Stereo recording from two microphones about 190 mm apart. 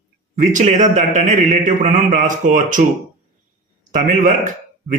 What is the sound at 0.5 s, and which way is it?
Speech, 40° right (ahead or behind).